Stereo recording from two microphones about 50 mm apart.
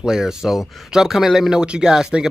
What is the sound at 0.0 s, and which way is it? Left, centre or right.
Speech, centre.